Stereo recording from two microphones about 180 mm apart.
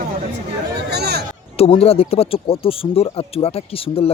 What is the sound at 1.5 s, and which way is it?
Speech, 35° left (ahead or behind).